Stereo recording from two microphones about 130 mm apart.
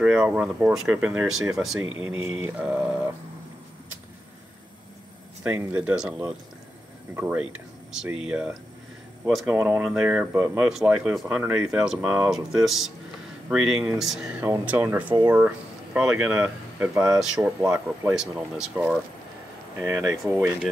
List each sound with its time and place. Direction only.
0.2 s speech: 10° right (ahead or behind)
5.4 s speech: 10° right (ahead or behind)
9.5 s speech: 15° right (ahead or behind)
14.4 s speech: 15° right (ahead or behind)
19.8 s speech: 25° right (ahead or behind)
20.2 s speech: 10° right (ahead or behind)